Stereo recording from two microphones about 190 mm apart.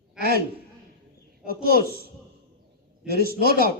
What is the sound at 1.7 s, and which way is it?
Speech, 55° right (ahead or behind).